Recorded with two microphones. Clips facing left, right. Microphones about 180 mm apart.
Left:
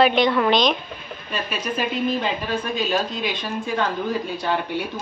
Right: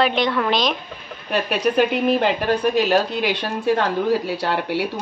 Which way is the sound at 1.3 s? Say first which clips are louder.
Right 8 dB; 65° right (ahead or behind).